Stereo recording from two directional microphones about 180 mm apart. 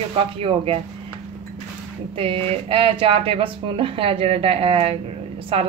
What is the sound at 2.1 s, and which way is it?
A woman's voice, 30° right (ahead or behind).